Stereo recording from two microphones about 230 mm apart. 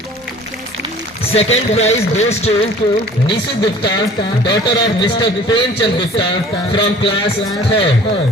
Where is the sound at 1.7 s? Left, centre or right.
Left.